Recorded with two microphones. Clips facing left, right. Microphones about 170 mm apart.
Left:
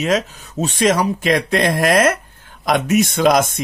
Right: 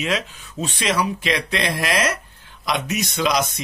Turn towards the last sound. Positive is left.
turn(degrees=50)  # may be behind; listen again after turning